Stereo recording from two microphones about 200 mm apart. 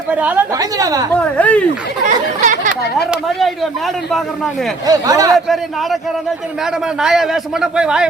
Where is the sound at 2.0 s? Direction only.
40° right (ahead or behind).